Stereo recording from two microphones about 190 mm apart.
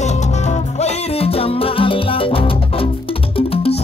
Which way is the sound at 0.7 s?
35° left (ahead or behind).